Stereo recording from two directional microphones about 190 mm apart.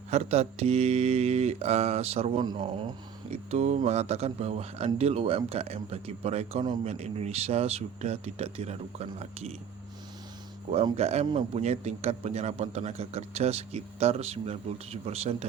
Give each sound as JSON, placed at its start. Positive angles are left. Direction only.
{"t": 0.1, "sound": "a man's voice", "side_deg": -35}
{"t": 10.7, "sound": "a man's voice", "side_deg": -30}